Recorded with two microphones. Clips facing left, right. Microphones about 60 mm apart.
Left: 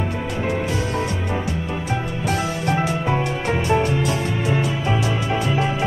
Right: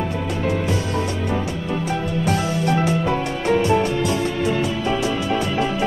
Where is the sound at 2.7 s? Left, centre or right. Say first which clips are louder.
Right 1 dB; centre.